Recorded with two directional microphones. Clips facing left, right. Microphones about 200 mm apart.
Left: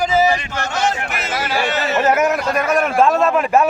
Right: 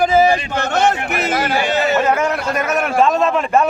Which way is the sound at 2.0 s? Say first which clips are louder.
Left 1 dB; 5° left (ahead or behind).